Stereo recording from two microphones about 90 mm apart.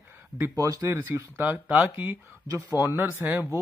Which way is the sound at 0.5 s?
40° right (ahead or behind).